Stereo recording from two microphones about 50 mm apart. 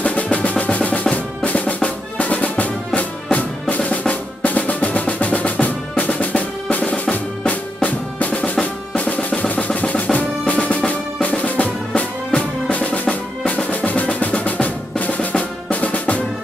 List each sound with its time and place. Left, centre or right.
0.0 s percussion: left
1.1 s drum: left
4.1 s percussion: left
8.9 s drum roll: left
9.8 s drum: left
10.9 s music: left
13.7 s percussion: left